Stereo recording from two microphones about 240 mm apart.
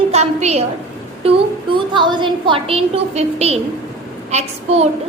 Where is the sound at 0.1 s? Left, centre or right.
Right.